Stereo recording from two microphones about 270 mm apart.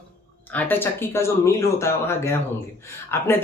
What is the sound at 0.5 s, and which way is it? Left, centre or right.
Speech, centre.